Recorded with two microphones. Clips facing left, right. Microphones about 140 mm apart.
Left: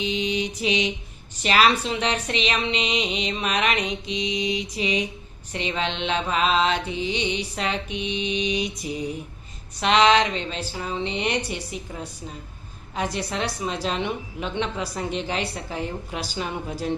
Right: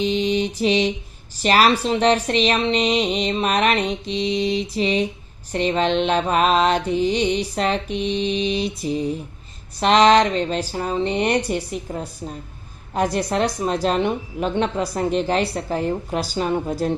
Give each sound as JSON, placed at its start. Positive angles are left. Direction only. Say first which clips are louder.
{"t": 0.0, "sound": "a woman's voice", "louder": "right 5 dB", "side_deg": -35}
{"t": 13.0, "sound": "a woman's voice", "louder": "right 7 dB", "side_deg": -45}